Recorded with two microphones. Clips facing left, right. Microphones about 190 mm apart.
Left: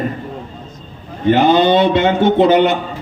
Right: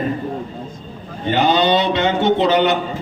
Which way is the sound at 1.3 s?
50° left (ahead or behind).